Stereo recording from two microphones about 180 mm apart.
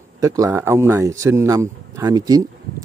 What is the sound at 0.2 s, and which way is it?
A man's voice, 15° right (ahead or behind).